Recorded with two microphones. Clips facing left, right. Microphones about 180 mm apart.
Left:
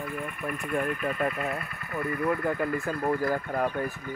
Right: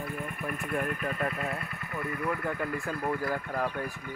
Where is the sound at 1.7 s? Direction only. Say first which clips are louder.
Left 1 dB; 20° right (ahead or behind).